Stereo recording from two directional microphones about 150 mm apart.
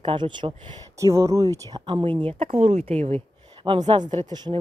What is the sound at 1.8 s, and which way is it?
Speech, 35° right (ahead or behind).